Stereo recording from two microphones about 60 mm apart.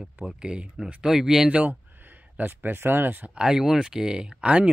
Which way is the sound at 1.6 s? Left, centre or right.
Right.